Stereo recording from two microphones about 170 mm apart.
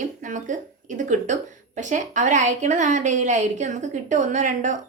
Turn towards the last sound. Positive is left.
turn(degrees=-45)  # may be behind; listen again after turning